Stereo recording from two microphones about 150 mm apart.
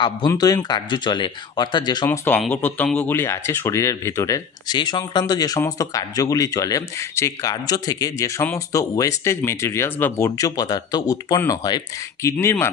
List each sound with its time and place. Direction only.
0.3 s speech: 25° left (ahead or behind)
2.0 s speech: 15° left (ahead or behind)